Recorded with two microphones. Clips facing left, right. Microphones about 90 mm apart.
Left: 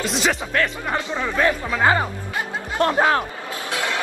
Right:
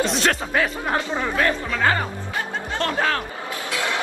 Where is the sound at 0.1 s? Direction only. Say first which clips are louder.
Right 1 dB; centre (ahead or behind).